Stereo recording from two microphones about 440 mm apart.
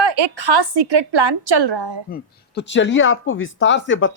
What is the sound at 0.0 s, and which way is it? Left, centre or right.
A woman's voice, right.